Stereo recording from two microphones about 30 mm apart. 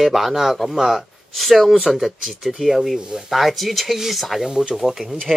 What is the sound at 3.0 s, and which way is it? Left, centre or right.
Speech, right.